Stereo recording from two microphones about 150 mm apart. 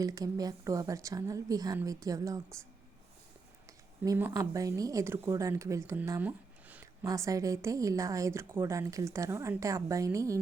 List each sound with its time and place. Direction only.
0.0 s speech: 25° right (ahead or behind)
4.0 s speech: 20° right (ahead or behind)